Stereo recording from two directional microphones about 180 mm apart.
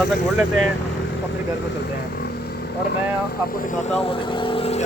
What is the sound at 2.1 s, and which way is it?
Vehicle, 60° left (ahead or behind).